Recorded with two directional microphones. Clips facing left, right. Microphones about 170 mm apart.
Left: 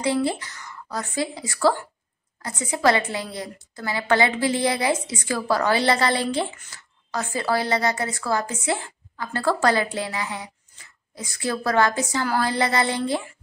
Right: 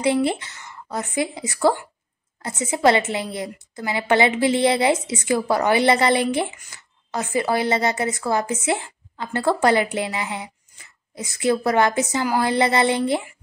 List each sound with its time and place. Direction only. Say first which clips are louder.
0.0 s a woman's voice: right 3 dB; 20° right (ahead or behind)